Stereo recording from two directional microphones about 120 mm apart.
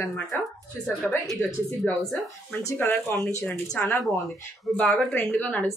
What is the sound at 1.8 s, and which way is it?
Speech, 10° left (ahead or behind).